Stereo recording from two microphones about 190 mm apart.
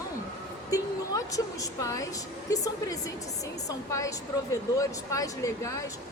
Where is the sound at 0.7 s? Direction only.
20° left (ahead or behind).